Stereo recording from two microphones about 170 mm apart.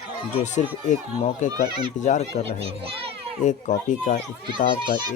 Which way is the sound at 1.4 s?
45° left (ahead or behind).